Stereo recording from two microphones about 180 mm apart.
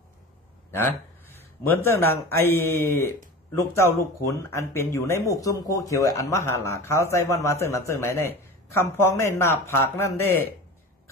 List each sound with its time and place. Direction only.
0.7 s a man's voice: 10° left (ahead or behind)